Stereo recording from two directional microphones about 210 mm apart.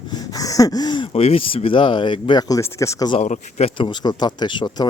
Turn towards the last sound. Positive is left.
turn(degrees=20)  # may be behind; listen again after turning